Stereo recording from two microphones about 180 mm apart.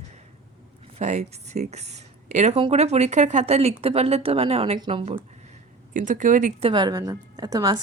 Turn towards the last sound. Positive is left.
turn(degrees=-20)  # may be behind; listen again after turning